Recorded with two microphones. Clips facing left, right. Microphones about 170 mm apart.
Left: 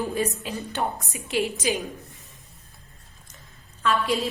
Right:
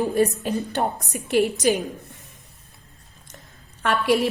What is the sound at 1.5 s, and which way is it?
Speech, 55° right (ahead or behind).